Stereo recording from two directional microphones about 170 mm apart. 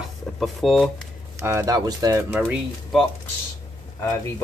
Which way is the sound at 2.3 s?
5° right (ahead or behind).